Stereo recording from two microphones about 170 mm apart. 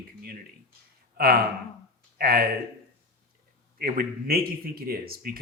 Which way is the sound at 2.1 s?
65° right (ahead or behind).